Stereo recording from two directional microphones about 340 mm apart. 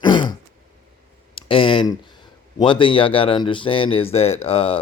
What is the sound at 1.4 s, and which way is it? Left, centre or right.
Speech, centre.